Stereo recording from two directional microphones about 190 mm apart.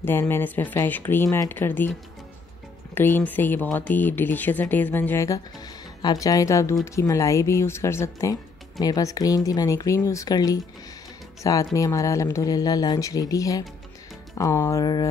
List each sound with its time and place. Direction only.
0.0 s speech: 10° left (ahead or behind)
2.9 s speech: 10° left (ahead or behind)